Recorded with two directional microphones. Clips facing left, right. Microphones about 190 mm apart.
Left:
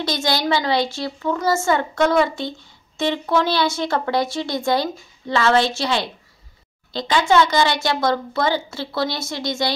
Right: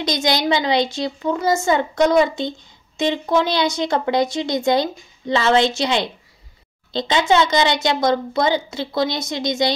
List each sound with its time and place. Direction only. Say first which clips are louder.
0.0 s a woman's voice: right 2 dB; 15° right (ahead or behind)